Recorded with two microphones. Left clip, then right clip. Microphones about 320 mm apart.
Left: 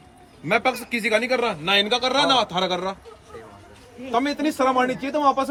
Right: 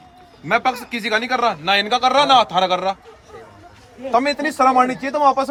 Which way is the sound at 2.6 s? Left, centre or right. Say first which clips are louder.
Right 6 dB; right.